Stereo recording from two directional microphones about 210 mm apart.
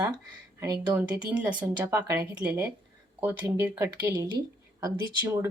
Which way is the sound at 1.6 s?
15° right (ahead or behind).